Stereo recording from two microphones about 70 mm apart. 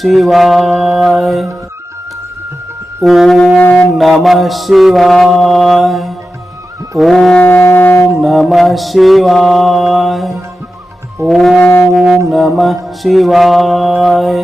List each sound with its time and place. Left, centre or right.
0.0 s mantra: centre
3.0 s mantra: centre
3.6 s music: left
3.9 s mantra: centre
7.4 s wind instrument: left
8.1 s mantra: centre
11.9 s music: centre
12.3 s mantra: centre